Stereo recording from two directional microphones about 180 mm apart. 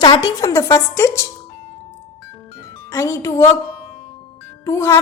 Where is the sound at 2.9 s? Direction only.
15° left (ahead or behind).